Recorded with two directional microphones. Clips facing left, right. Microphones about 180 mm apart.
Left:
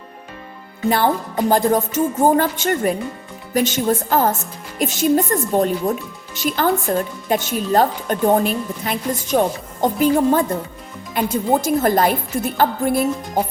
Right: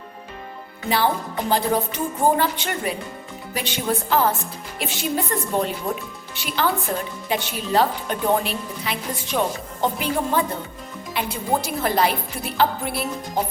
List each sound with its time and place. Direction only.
0.9 s a woman's voice: 50° left (ahead or behind)